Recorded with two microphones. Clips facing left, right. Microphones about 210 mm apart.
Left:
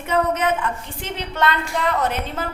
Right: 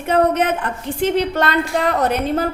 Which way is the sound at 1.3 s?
40° right (ahead or behind).